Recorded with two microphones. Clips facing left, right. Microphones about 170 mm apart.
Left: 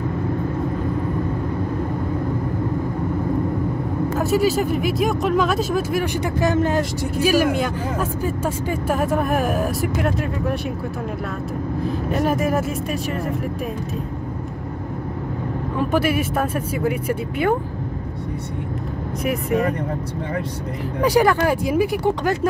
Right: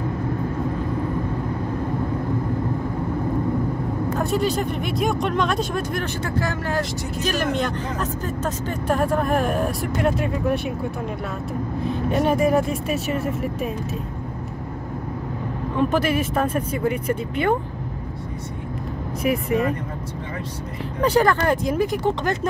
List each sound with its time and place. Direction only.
4.2 s speech: 5° left (ahead or behind)
6.2 s speech: 20° left (ahead or behind)
7.2 s speech: 10° left (ahead or behind)
11.8 s speech: centre (ahead or behind)
15.7 s speech: 5° left (ahead or behind)
21.0 s speech: 10° left (ahead or behind)